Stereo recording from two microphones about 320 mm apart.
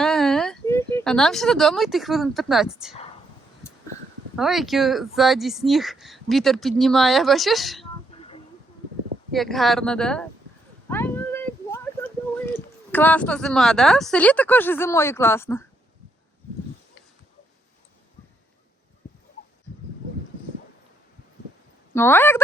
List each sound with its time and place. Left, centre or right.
0.0 s speech: centre
4.4 s speech: centre
8.1 s a sound: centre
9.3 s speech: centre
10.8 s a sound: centre
12.5 s speech: centre
21.9 s speech: centre